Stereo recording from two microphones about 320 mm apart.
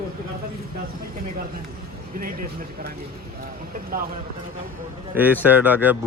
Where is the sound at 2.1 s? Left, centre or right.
Right.